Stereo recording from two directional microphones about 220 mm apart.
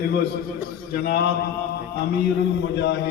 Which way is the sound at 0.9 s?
45° left (ahead or behind).